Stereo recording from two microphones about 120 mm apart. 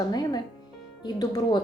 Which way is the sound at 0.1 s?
35° left (ahead or behind).